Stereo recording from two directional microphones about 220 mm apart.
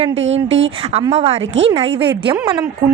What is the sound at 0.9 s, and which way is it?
A woman's voice, 25° right (ahead or behind).